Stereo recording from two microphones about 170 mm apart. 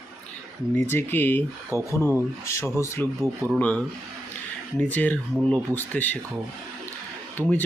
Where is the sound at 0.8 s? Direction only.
15° left (ahead or behind).